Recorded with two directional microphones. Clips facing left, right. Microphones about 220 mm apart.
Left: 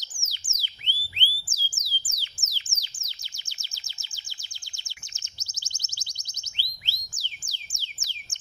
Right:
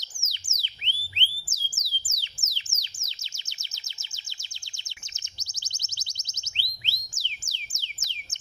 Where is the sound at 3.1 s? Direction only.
20° right (ahead or behind).